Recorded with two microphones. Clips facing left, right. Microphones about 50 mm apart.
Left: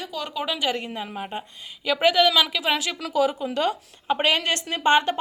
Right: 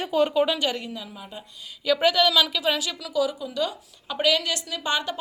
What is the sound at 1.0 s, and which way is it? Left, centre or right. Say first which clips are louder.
Speech: left 7 dB; left.